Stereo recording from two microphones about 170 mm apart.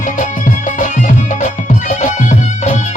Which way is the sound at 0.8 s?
50° left (ahead or behind).